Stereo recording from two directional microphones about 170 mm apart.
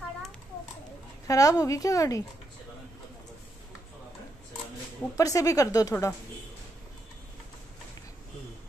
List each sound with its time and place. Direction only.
1.2 s speech: 20° left (ahead or behind)
5.1 s speech: 20° left (ahead or behind)